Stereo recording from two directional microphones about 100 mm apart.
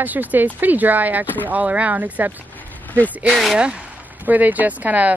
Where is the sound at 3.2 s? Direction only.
Centre (ahead or behind).